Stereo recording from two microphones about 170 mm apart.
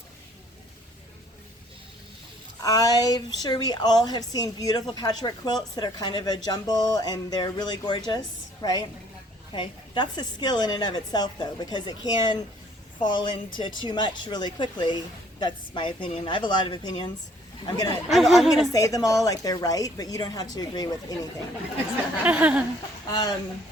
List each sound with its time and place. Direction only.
2.6 s a woman's voice: 20° left (ahead or behind)
18.1 s speech: centre (ahead or behind)
18.7 s a woman's voice: 20° left (ahead or behind)
22.2 s speech: 10° right (ahead or behind)